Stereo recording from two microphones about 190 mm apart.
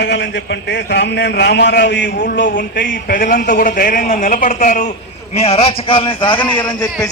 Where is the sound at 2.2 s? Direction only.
45° left (ahead or behind).